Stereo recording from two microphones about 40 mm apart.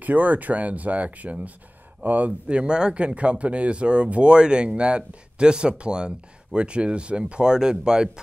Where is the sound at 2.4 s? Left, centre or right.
Right.